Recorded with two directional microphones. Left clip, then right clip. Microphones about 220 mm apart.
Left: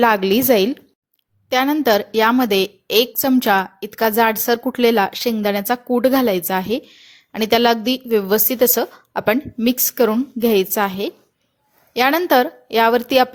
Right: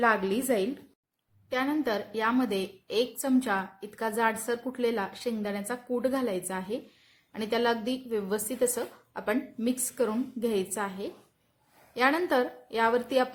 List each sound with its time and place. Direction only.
0.0 s a woman's voice: 40° left (ahead or behind)